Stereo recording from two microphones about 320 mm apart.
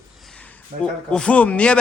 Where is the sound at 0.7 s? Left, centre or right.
Right.